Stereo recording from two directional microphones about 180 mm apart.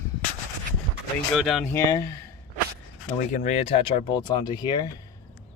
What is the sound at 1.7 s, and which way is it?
Speech, 15° left (ahead or behind).